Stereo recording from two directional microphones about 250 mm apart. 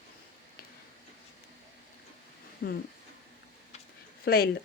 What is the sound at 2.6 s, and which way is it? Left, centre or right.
Speech, left.